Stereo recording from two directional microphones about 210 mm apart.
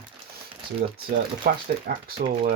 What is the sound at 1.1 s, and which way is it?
Speech, 40° right (ahead or behind).